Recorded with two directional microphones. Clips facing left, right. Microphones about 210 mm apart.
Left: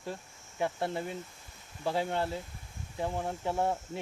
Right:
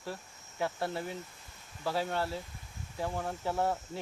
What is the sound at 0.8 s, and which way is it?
Speech, 25° left (ahead or behind).